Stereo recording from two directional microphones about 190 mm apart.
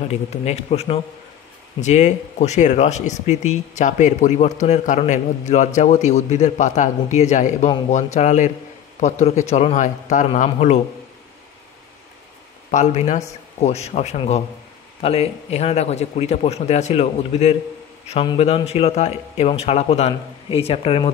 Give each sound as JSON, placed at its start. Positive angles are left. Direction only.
{"t": 0.1, "sound": "speech", "side_deg": 35}
{"t": 12.7, "sound": "speech", "side_deg": 40}